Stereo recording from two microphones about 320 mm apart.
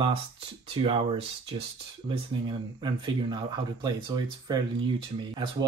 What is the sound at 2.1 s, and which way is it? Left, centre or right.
Speech, centre.